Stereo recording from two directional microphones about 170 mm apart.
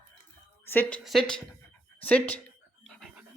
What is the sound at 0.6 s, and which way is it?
Speech, 10° left (ahead or behind).